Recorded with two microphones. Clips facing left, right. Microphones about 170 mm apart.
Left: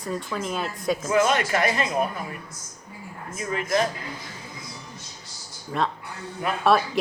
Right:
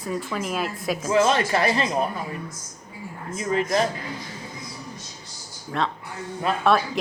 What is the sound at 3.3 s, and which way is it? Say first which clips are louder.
Speech: right 2 dB; 30° right (ahead or behind).